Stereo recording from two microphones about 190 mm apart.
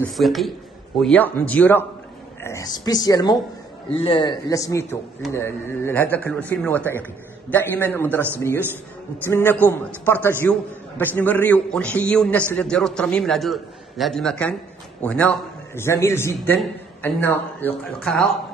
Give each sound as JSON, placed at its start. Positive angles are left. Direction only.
{"t": 0.1, "sound": "a man's voice", "side_deg": 0}